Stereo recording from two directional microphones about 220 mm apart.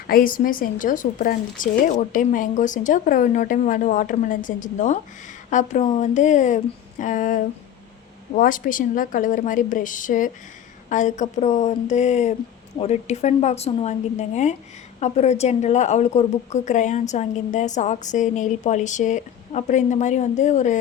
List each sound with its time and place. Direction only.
0.1 s a woman's voice: 40° left (ahead or behind)